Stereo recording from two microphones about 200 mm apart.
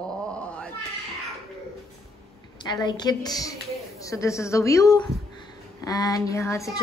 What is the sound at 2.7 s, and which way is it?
A woman's voice, 20° left (ahead or behind).